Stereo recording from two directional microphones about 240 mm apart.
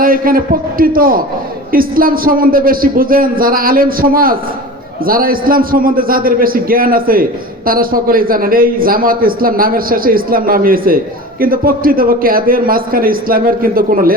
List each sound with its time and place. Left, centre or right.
0.0 s a man's voice: right